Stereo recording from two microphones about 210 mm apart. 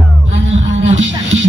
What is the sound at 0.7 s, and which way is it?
Music, 60° right (ahead or behind).